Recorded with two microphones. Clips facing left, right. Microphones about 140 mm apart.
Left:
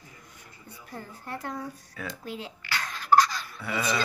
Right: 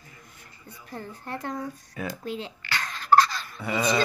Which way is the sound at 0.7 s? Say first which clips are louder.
Right 3 dB; 5° left (ahead or behind).